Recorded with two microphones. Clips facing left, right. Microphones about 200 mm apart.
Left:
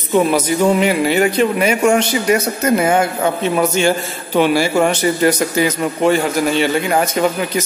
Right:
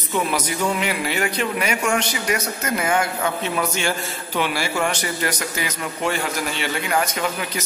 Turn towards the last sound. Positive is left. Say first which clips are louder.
# left 7 dB
turn(degrees=30)  # may be behind; listen again after turning